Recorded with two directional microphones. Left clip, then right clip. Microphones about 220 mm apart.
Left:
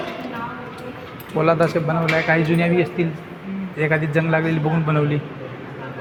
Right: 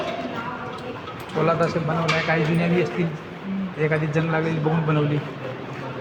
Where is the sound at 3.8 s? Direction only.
50° left (ahead or behind).